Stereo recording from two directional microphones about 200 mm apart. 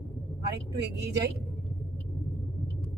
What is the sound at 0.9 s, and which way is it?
Speech, 60° right (ahead or behind).